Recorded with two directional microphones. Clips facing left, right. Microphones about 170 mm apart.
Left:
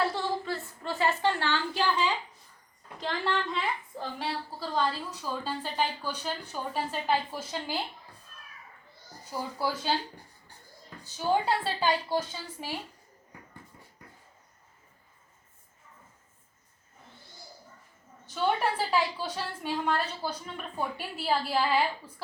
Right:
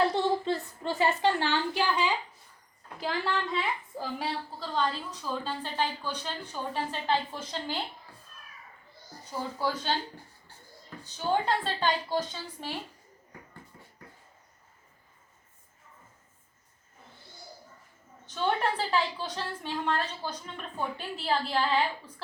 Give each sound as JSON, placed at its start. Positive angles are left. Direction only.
{"t": 0.0, "sound": "a sound", "side_deg": -20}
{"t": 3.0, "sound": "a woman's voice", "side_deg": 0}
{"t": 9.3, "sound": "a woman's voice", "side_deg": 10}
{"t": 11.0, "sound": "a woman's voice", "side_deg": 10}
{"t": 18.3, "sound": "a woman's voice", "side_deg": 10}